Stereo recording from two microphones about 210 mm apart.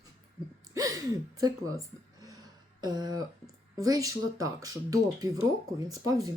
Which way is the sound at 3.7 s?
15° right (ahead or behind).